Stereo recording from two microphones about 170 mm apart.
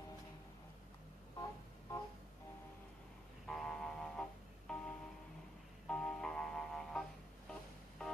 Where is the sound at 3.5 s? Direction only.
5° left (ahead or behind).